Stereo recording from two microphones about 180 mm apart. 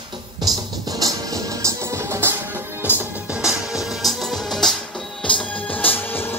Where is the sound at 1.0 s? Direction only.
20° right (ahead or behind).